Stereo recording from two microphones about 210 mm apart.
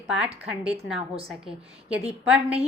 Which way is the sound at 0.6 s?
5° right (ahead or behind).